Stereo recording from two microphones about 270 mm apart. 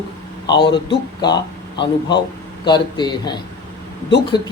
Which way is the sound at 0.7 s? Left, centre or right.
Centre.